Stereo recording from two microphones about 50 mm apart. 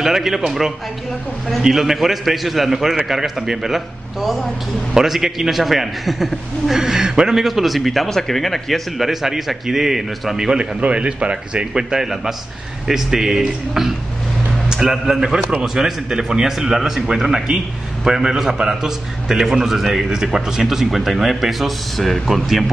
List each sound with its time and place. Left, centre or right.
0.0 s a man's voice: centre
10.8 s a man's voice: right; by 22.4 s centre